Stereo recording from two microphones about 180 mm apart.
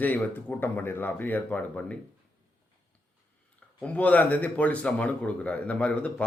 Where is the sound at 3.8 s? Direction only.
10° left (ahead or behind).